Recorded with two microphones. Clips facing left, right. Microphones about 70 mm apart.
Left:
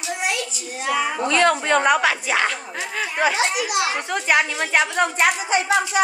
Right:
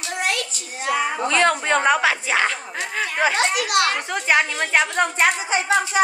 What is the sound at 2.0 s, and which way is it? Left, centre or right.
Speech, right.